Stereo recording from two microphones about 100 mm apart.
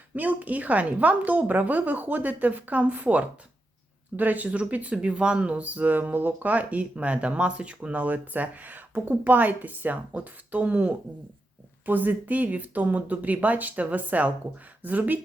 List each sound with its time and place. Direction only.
0.1 s speech: 15° right (ahead or behind)